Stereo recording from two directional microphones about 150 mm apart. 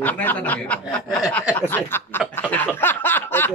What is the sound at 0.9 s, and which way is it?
Speech, 5° left (ahead or behind).